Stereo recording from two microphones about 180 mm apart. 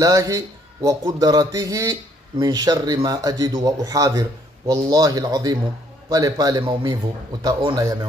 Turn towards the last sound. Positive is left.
turn(degrees=-20)  # may be behind; listen again after turning